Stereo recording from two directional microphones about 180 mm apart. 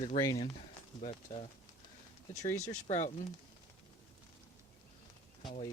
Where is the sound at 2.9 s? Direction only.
35° left (ahead or behind).